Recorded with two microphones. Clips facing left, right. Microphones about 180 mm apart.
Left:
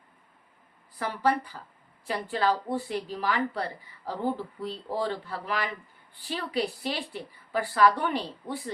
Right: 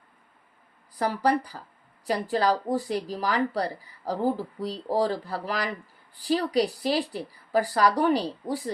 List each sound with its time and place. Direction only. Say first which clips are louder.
0.9 s speech: right 3 dB; 40° right (ahead or behind)